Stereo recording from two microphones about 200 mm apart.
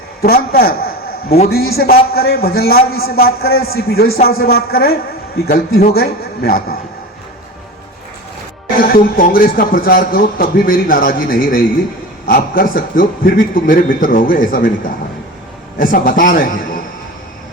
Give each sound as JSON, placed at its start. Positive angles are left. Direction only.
{"t": 0.2, "sound": "a man's voice", "side_deg": 50}
{"t": 8.8, "sound": "speech", "side_deg": 45}
{"t": 15.8, "sound": "speech", "side_deg": 45}